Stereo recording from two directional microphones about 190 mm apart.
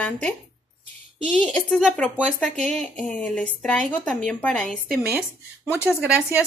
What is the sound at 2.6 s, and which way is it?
Speech, 35° right (ahead or behind).